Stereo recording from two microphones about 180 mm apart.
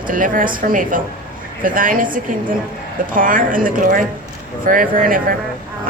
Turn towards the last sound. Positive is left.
turn(degrees=-50)  # may be behind; listen again after turning